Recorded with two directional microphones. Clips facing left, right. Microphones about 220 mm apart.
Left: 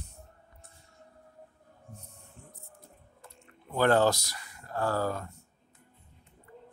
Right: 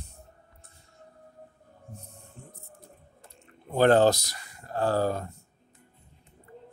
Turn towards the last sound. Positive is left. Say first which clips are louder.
# right 4 dB
turn(degrees=-30)  # may be behind; listen again after turning